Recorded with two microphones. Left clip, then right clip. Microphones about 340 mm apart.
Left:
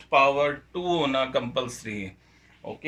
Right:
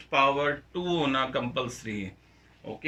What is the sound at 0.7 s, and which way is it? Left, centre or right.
Speech, left.